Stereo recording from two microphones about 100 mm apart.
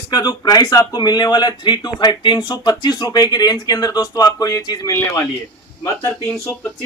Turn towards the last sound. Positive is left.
turn(degrees=20)  # may be behind; listen again after turning